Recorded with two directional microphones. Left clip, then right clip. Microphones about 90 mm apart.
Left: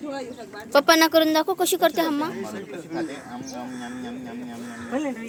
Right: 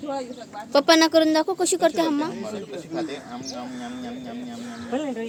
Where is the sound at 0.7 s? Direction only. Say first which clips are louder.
Even; 30° right (ahead or behind).